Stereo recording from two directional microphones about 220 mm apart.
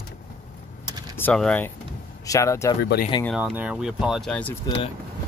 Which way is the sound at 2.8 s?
45° left (ahead or behind).